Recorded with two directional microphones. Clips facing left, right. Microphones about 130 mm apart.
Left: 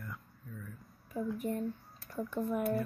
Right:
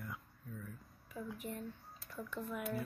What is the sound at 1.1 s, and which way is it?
Speech, 45° left (ahead or behind).